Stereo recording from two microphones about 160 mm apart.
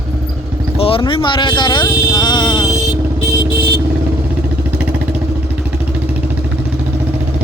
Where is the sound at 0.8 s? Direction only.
35° left (ahead or behind).